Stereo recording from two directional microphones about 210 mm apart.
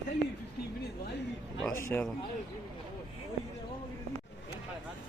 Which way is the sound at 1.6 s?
10° left (ahead or behind).